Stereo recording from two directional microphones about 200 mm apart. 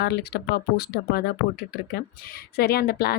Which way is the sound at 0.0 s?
55° left (ahead or behind).